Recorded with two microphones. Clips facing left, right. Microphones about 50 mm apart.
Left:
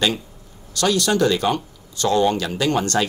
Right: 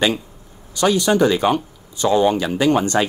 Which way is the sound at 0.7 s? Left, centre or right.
Centre.